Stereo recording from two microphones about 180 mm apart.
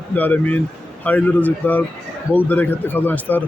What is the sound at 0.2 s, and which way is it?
A man's voice, 10° left (ahead or behind).